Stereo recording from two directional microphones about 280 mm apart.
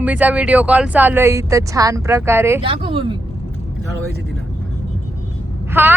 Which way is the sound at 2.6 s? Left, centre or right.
Centre.